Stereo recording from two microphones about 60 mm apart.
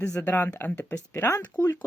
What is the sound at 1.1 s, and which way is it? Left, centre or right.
Speech, left.